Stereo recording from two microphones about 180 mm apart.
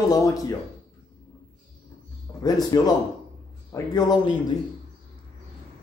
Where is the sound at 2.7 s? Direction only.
20° left (ahead or behind).